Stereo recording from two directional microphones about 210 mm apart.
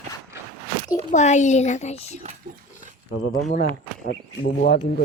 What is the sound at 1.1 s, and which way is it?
Speech, 35° left (ahead or behind).